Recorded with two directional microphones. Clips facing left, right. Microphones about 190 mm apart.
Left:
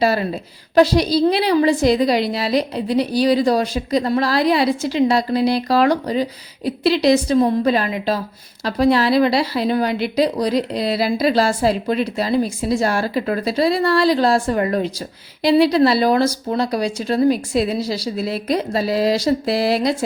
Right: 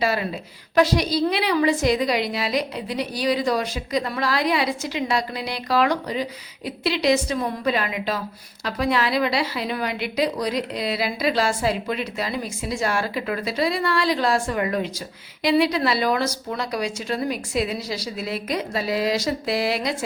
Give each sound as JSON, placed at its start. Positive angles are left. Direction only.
{"t": 0.0, "sound": "a woman's voice", "side_deg": 35}